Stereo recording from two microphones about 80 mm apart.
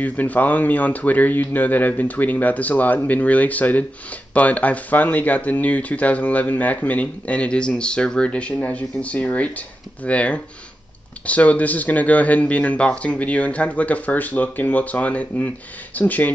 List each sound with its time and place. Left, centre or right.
0.0 s speech: left